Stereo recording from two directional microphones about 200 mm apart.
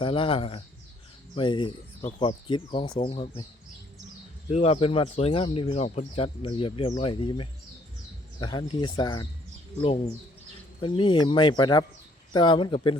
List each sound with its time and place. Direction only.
0.0 s speech: 25° left (ahead or behind)
4.5 s speech: 30° left (ahead or behind)
10.8 s speech: 25° left (ahead or behind)